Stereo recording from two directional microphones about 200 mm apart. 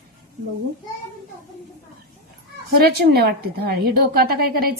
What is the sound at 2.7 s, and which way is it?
A woman's voice, 50° right (ahead or behind).